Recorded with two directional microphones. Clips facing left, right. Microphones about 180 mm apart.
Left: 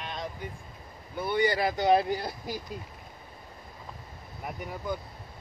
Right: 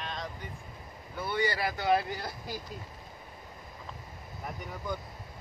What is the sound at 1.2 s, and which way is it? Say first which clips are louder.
Speech: left 5 dB; 15° left (ahead or behind).